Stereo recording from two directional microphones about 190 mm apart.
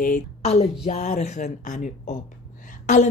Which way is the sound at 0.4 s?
35° left (ahead or behind).